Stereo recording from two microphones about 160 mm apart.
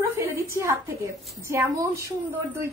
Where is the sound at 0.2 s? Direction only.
20° right (ahead or behind).